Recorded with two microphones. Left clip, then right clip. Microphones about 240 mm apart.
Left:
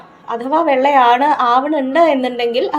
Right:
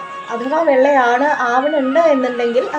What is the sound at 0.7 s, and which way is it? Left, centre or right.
A woman's voice, left.